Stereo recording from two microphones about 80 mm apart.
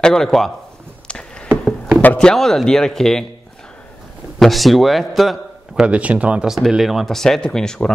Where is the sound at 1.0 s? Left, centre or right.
Centre.